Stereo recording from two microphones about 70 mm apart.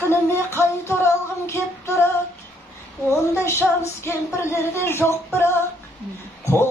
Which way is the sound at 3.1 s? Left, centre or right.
Left.